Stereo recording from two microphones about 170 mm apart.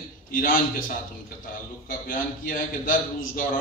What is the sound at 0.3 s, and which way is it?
A man's voice, 55° left (ahead or behind).